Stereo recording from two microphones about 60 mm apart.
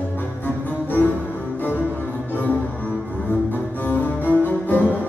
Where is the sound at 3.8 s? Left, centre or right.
Left.